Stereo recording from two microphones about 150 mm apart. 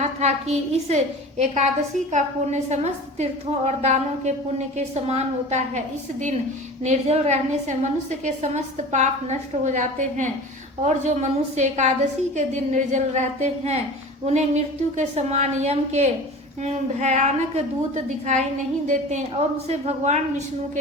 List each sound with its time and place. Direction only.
0.0 s a woman's voice: 45° right (ahead or behind)
6.8 s a woman's voice: 50° right (ahead or behind)